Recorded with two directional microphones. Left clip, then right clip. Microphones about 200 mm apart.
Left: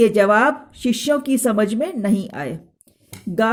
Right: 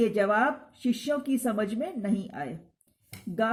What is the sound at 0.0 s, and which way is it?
A woman's voice, 45° left (ahead or behind).